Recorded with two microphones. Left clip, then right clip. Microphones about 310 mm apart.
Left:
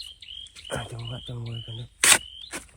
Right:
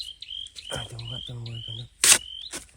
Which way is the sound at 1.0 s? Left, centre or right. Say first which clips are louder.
Right 2 dB; left.